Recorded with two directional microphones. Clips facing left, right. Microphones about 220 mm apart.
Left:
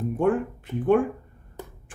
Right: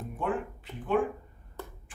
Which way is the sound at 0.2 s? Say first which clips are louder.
Left 8 dB; 50° left (ahead or behind).